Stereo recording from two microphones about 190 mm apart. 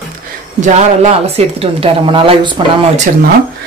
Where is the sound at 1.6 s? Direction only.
30° right (ahead or behind).